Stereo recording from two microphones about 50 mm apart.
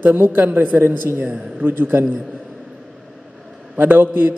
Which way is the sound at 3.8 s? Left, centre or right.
Right.